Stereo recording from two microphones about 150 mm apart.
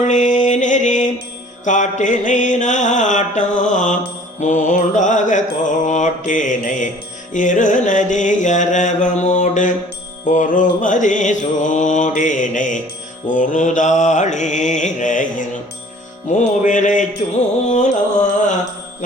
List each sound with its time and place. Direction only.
0.1 s music: 55° left (ahead or behind)
7.3 s mantra: 60° left (ahead or behind)
17.7 s carnatic music: 50° left (ahead or behind)